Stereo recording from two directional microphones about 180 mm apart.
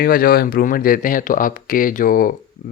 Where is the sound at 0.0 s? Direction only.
55° left (ahead or behind).